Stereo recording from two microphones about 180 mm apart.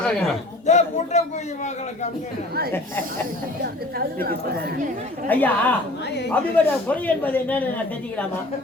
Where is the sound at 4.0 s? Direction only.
60° right (ahead or behind).